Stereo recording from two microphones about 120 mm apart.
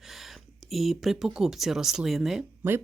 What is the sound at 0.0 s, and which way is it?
Speech, centre (ahead or behind).